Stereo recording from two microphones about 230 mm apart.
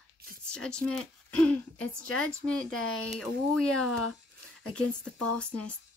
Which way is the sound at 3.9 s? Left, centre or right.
Left.